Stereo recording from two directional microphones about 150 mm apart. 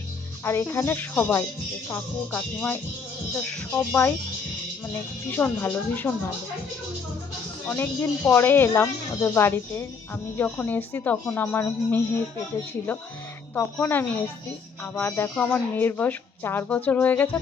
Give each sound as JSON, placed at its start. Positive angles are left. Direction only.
{"t": 0.4, "sound": "speech", "side_deg": 15}
{"t": 5.3, "sound": "speech", "side_deg": 15}
{"t": 7.7, "sound": "speech", "side_deg": 20}
{"t": 13.6, "sound": "speech", "side_deg": 15}